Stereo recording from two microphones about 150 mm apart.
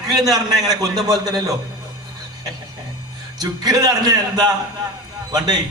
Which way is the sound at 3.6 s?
25° right (ahead or behind).